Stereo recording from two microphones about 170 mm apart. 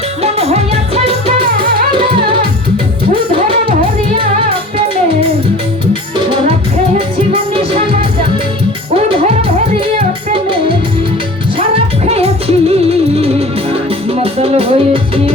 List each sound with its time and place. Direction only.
0.2 s music: 35° right (ahead or behind)
3.3 s music: 30° right (ahead or behind)
9.0 s music: 35° right (ahead or behind)
12.0 s music: 35° right (ahead or behind)
14.2 s music: 35° right (ahead or behind)